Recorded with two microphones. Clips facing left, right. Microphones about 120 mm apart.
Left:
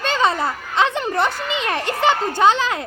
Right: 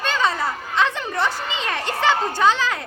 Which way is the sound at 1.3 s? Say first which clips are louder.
Left 3 dB; 60° left (ahead or behind).